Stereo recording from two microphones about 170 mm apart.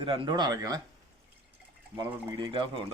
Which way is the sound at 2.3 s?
30° right (ahead or behind).